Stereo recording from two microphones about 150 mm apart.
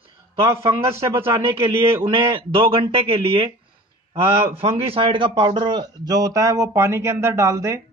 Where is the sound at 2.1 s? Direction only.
35° right (ahead or behind).